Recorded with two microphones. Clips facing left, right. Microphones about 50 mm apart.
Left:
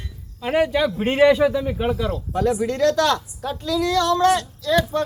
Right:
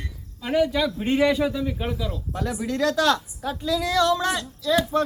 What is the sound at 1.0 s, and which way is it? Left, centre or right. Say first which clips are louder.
Speech: left 6 dB; left.